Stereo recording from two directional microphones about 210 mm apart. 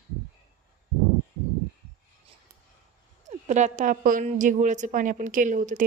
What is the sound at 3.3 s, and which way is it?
A woman's voice, 35° right (ahead or behind).